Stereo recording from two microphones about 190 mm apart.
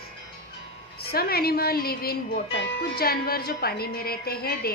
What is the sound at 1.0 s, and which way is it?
Speech, 55° left (ahead or behind).